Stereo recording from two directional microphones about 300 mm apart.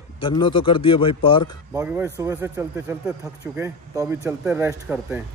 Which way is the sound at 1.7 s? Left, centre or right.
Centre.